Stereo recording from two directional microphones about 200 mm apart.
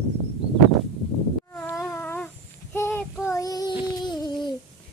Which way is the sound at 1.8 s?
10° left (ahead or behind).